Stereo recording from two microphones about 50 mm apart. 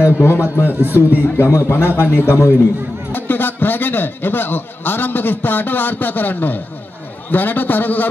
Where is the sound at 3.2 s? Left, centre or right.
Left.